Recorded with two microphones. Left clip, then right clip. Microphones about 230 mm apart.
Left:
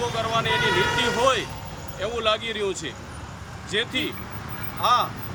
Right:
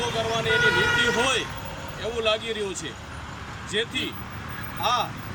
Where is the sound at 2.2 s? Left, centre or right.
Centre.